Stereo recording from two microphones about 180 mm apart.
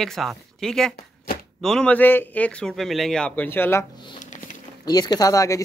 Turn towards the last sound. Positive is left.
turn(degrees=20)  # may be behind; listen again after turning